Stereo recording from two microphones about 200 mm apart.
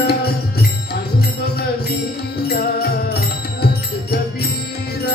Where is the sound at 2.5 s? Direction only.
50° left (ahead or behind).